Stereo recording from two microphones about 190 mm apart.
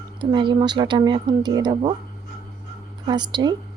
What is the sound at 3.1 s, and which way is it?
Speech, 20° right (ahead or behind).